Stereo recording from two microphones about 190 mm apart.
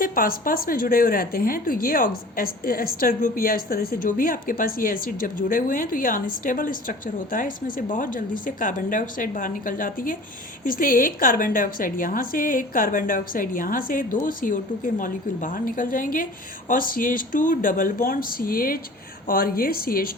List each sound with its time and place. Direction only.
0.0 s a woman's voice: 50° left (ahead or behind)